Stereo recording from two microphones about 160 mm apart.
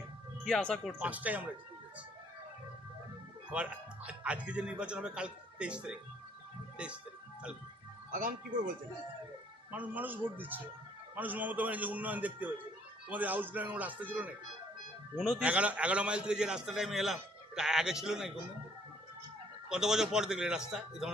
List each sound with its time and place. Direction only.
0.4 s a man's voice: centre (ahead or behind)
0.9 s speech: 10° right (ahead or behind)
3.5 s speech: 5° right (ahead or behind)
8.1 s speech: 55° right (ahead or behind)
9.7 s a man's voice: 10° right (ahead or behind)
19.7 s a man's voice: 5° right (ahead or behind)